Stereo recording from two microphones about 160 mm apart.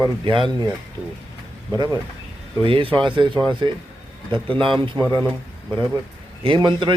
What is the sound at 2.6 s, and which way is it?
Speech, 35° right (ahead or behind).